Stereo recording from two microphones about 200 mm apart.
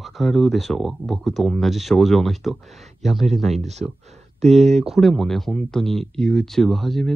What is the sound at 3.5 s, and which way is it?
Speech, 35° right (ahead or behind).